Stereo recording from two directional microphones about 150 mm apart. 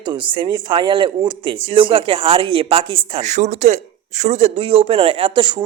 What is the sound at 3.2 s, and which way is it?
Speech, 50° right (ahead or behind).